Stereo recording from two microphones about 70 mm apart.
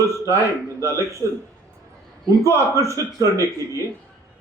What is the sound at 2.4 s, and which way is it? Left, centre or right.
Speech, right.